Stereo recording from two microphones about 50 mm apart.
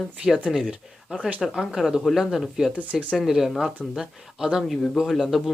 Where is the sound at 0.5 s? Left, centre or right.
Centre.